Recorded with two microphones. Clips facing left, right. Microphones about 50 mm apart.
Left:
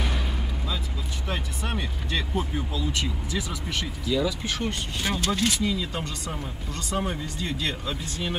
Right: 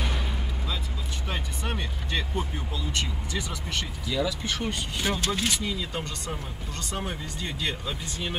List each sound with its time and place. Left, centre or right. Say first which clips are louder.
1.3 s speech: left 2 dB; centre